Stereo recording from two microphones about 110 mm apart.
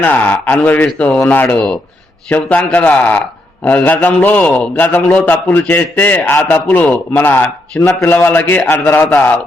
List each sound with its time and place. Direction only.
0.0 s a man's voice: 15° left (ahead or behind)